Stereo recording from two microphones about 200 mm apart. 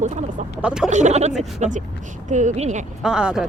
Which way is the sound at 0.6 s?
5° right (ahead or behind).